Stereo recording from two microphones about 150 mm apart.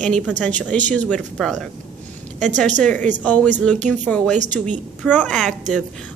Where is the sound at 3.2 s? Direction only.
10° left (ahead or behind).